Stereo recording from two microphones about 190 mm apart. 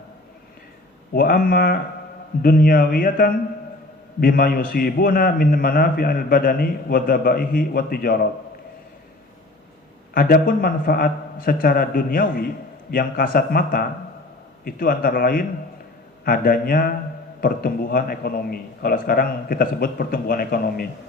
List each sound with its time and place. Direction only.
1.1 s a man's voice: 50° left (ahead or behind)
10.2 s a man's voice: 50° left (ahead or behind)